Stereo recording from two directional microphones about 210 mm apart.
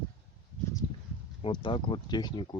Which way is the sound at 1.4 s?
25° left (ahead or behind).